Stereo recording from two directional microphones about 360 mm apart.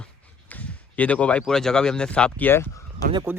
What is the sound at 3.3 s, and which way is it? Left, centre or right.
Speech, centre.